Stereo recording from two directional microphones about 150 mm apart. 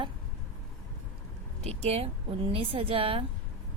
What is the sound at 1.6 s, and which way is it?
A woman's voice, 40° right (ahead or behind).